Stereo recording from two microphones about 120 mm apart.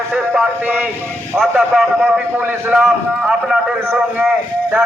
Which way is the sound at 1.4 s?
5° right (ahead or behind).